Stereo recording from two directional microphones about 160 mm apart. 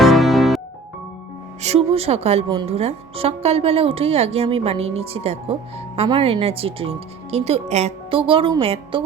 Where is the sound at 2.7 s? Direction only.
40° right (ahead or behind).